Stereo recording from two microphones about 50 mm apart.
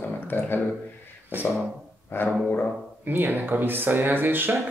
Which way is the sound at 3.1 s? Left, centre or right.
Right.